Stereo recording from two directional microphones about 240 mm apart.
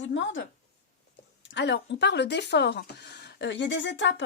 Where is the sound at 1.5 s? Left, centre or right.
Left.